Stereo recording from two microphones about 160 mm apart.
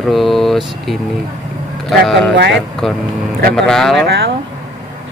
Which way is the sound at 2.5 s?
Centre (ahead or behind).